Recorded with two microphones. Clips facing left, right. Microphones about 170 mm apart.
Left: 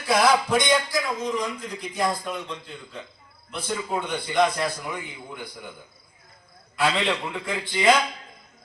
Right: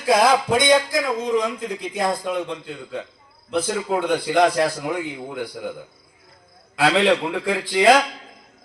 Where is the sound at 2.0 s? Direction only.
60° right (ahead or behind).